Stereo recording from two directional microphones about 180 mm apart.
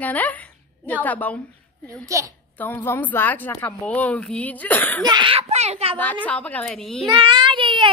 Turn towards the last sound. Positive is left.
turn(degrees=-30)  # may be behind; listen again after turning